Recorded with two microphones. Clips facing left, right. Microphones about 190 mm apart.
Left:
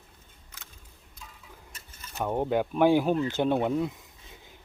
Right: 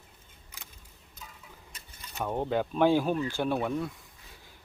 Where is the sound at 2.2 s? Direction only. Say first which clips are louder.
Left 3 dB; 15° left (ahead or behind).